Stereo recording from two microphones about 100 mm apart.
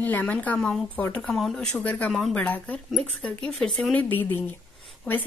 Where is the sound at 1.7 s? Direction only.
15° left (ahead or behind).